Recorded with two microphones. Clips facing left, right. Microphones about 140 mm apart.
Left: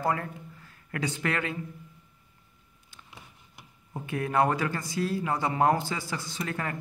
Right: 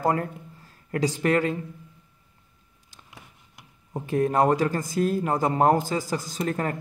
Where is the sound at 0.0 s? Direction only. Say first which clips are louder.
Right 5 dB; 40° right (ahead or behind).